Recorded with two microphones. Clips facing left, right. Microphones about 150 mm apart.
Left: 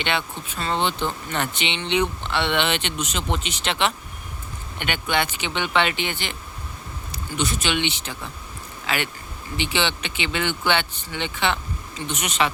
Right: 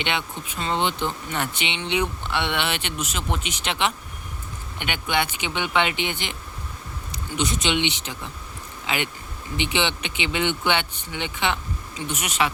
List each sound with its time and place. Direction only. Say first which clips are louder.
0.0 s speech: left 1 dB; 15° right (ahead or behind)